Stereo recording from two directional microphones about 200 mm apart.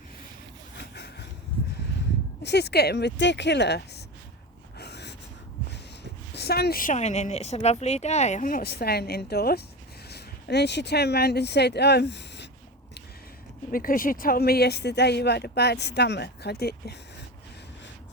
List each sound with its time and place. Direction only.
2.4 s speech: 55° left (ahead or behind)
4.8 s gasp: 55° left (ahead or behind)
6.3 s a woman's voice: 55° left (ahead or behind)
13.7 s speech: 45° left (ahead or behind)